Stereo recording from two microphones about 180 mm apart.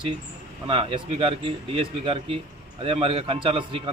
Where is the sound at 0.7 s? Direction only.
30° right (ahead or behind).